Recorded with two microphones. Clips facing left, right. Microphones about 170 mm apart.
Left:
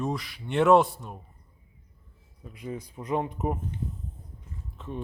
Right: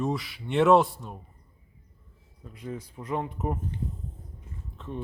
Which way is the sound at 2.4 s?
15° left (ahead or behind).